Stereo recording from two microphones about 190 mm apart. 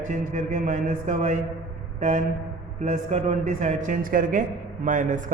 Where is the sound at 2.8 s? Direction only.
35° right (ahead or behind).